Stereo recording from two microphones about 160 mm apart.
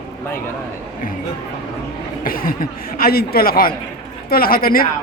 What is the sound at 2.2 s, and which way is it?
A woman's voice, 65° left (ahead or behind).